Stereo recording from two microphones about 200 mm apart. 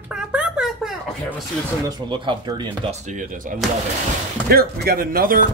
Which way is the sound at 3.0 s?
40° right (ahead or behind).